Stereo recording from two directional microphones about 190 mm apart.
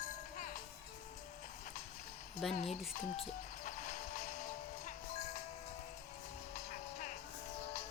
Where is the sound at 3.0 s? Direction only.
35° left (ahead or behind).